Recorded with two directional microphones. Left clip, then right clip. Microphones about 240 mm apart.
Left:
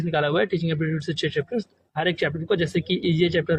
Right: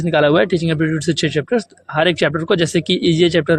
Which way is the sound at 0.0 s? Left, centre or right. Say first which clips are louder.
Right 9 dB; right.